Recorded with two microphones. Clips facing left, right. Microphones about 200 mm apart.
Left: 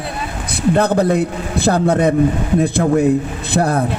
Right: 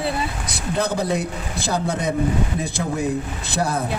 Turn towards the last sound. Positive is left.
turn(degrees=60)  # may be behind; listen again after turning